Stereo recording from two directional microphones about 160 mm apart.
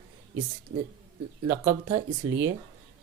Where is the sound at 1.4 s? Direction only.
15° right (ahead or behind).